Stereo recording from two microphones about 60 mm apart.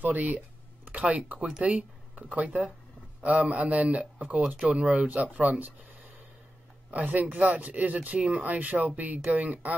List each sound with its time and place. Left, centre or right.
0.0 s speech: right
6.9 s speech: right